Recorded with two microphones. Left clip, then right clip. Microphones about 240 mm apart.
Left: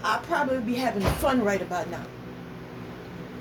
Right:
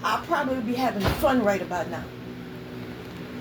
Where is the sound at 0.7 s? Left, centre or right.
Centre.